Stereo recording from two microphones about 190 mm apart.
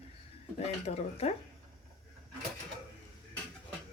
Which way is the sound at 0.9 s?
45° left (ahead or behind).